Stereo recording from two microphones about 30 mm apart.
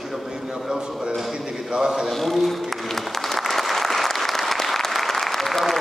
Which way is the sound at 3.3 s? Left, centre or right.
Centre.